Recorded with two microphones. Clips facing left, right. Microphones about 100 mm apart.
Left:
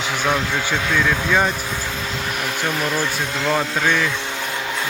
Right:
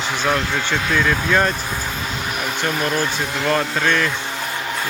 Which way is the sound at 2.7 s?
10° right (ahead or behind).